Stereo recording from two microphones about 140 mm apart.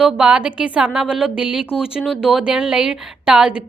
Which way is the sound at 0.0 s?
5° right (ahead or behind).